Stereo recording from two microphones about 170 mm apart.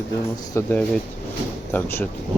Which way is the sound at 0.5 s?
10° left (ahead or behind).